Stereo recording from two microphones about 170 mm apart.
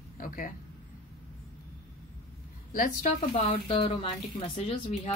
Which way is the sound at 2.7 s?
55° left (ahead or behind).